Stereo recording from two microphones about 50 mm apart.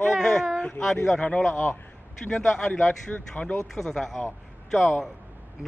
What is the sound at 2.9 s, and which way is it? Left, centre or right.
Speech, left.